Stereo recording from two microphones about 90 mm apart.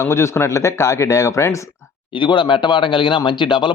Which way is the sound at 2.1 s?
65° left (ahead or behind).